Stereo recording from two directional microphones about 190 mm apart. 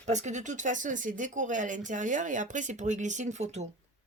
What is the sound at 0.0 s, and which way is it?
Speech, 40° right (ahead or behind).